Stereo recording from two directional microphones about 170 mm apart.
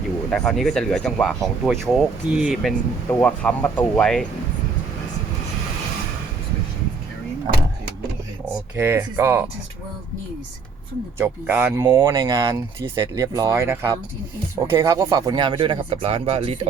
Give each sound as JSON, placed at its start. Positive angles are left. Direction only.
{"t": 0.3, "sound": "speech", "side_deg": 5}
{"t": 3.1, "sound": "speech", "side_deg": 10}
{"t": 8.7, "sound": "speech", "side_deg": -10}
{"t": 11.2, "sound": "speech", "side_deg": -10}